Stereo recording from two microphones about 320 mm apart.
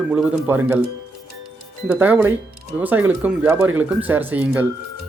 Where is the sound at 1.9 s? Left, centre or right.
Centre.